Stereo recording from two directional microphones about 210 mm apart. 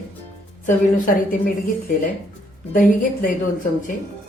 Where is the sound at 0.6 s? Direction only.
40° left (ahead or behind).